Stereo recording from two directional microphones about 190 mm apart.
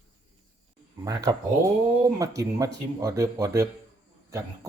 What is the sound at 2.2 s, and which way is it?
Speech, 15° right (ahead or behind).